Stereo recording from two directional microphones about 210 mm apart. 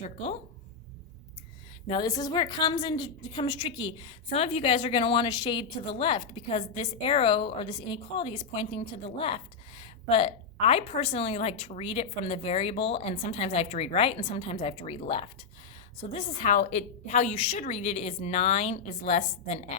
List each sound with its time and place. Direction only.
0.0 s a woman's voice: 30° left (ahead or behind)
1.9 s a woman's voice: 20° left (ahead or behind)